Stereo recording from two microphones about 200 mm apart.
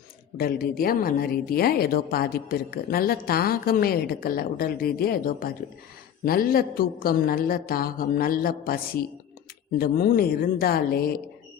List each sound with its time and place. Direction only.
0.3 s speech: 45° left (ahead or behind)